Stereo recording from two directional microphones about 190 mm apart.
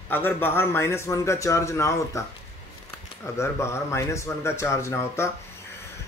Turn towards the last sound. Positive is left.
turn(degrees=15)  # may be behind; listen again after turning